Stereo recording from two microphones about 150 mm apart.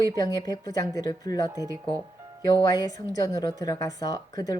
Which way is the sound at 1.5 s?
20° right (ahead or behind).